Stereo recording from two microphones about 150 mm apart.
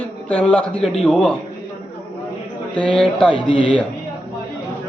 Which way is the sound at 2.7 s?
35° left (ahead or behind).